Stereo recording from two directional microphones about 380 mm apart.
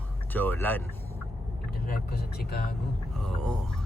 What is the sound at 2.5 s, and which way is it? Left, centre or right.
Speech, left.